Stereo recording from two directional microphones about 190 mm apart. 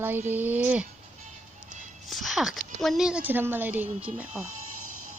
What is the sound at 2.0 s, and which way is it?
A woman's voice, centre (ahead or behind).